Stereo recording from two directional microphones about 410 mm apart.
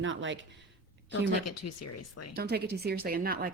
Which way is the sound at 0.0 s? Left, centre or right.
Right.